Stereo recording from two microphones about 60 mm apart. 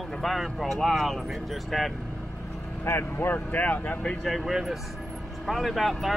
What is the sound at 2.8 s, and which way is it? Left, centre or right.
Speech, left.